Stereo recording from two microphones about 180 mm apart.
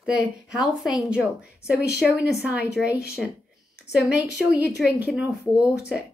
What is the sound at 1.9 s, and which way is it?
A woman's voice, 5° right (ahead or behind).